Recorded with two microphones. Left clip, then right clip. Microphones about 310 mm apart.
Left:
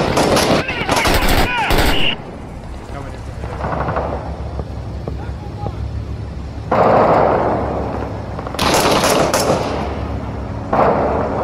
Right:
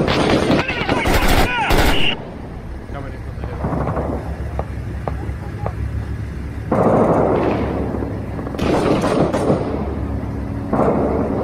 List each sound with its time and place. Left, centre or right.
0.6 s gunshot: centre
3.6 s gunshot: left
6.7 s a sound: left